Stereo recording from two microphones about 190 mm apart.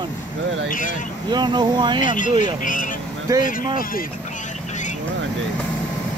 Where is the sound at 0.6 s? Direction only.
45° left (ahead or behind).